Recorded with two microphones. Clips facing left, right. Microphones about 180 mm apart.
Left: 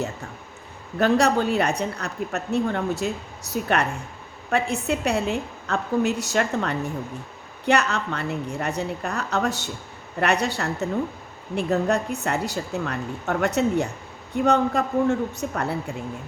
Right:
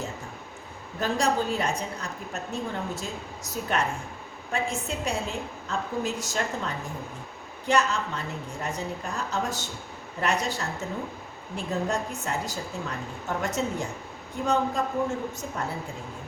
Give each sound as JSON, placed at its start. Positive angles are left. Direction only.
{"t": 0.9, "sound": "a woman's voice", "side_deg": 70}